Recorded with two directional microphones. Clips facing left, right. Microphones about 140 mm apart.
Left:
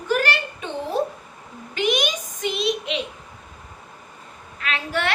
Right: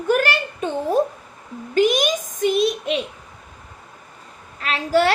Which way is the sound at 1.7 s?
45° right (ahead or behind).